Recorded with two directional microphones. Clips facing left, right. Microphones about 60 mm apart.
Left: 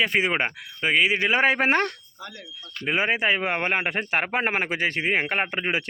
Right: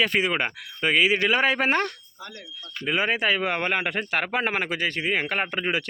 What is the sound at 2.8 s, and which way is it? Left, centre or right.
Speech, left.